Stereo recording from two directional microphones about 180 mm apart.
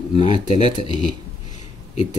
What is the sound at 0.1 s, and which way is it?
Speech, 40° left (ahead or behind).